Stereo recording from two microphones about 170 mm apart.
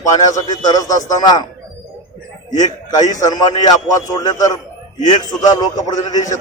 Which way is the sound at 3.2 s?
20° left (ahead or behind).